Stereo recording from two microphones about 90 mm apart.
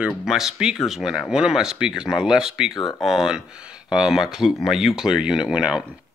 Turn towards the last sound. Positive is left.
turn(degrees=-5)  # may be behind; listen again after turning